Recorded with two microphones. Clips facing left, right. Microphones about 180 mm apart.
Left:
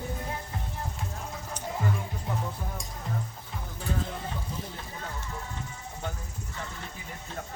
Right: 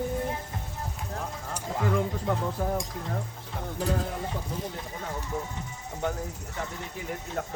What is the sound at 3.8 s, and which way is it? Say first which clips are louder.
Speech: right 5 dB; 40° right (ahead or behind).